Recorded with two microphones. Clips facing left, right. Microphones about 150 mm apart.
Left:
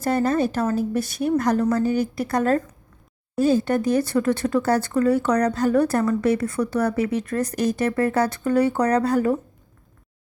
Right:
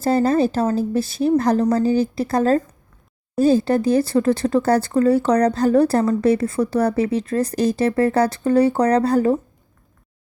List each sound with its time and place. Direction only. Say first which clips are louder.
0.0 s speech: right 4 dB; 30° right (ahead or behind)